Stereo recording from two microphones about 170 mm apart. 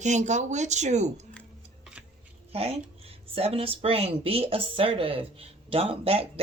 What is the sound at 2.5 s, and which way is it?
Speech, 35° right (ahead or behind).